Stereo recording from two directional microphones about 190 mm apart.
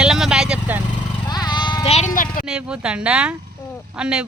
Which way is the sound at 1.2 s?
20° left (ahead or behind).